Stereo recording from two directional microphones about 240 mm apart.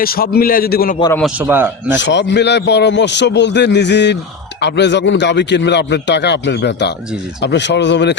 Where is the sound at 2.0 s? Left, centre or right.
Left.